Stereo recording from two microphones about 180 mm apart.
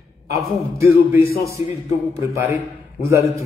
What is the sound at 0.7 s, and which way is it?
Speech, 15° right (ahead or behind).